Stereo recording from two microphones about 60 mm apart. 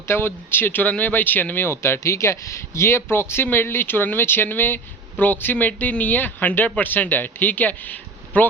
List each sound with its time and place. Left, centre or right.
0.1 s a man's voice: left